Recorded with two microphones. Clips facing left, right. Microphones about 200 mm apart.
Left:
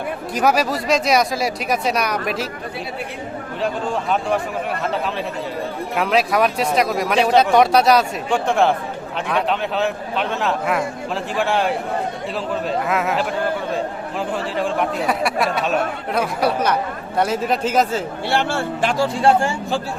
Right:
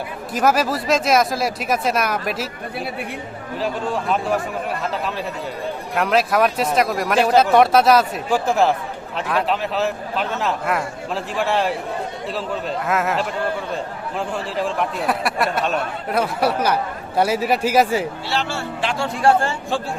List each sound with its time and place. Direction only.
0.3 s speech: centre (ahead or behind)
5.9 s speech: centre (ahead or behind)
14.3 s speech: centre (ahead or behind)
18.3 s speech: 55° left (ahead or behind)
19.1 s speech: 20° left (ahead or behind)